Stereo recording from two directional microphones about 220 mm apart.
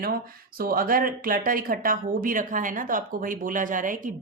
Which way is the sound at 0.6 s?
40° right (ahead or behind).